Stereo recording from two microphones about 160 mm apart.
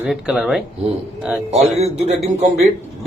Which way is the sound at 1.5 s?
40° right (ahead or behind).